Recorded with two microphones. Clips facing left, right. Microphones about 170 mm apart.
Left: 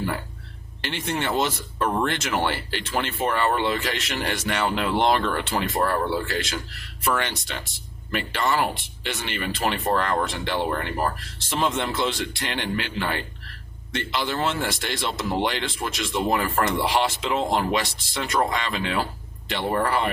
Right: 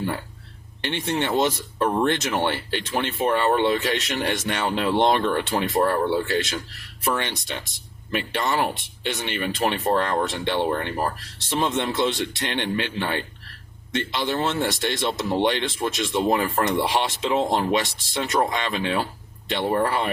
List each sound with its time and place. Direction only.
0.9 s speech: 20° right (ahead or behind)
9.0 s speech: 20° right (ahead or behind)